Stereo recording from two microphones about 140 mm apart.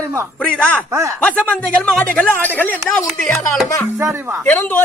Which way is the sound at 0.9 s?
20° right (ahead or behind).